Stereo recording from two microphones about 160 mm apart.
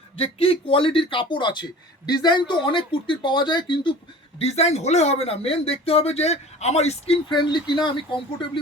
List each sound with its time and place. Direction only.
0.2 s speech: 35° left (ahead or behind)
4.4 s speech: 40° left (ahead or behind)